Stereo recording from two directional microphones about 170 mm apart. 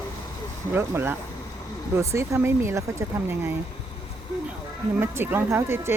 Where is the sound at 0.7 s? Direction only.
15° right (ahead or behind).